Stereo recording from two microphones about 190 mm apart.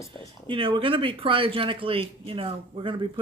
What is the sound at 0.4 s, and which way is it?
Speech, 25° right (ahead or behind).